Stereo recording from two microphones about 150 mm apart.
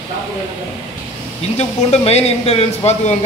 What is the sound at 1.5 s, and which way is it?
Speech, 45° left (ahead or behind).